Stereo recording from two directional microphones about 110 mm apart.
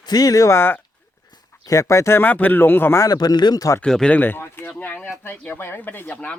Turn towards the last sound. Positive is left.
turn(degrees=10)  # may be behind; listen again after turning